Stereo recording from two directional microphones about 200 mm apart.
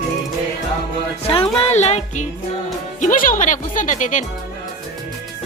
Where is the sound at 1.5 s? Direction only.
35° left (ahead or behind).